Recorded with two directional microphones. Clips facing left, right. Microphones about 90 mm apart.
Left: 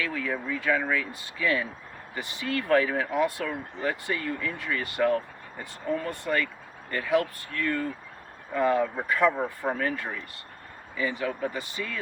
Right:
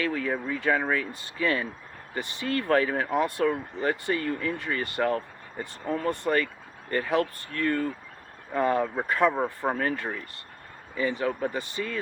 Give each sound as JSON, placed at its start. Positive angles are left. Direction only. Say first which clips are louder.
{"t": 0.0, "sound": "speech", "louder": "right 2 dB", "side_deg": -35}